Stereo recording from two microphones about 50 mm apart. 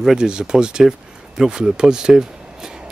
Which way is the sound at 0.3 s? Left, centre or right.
Centre.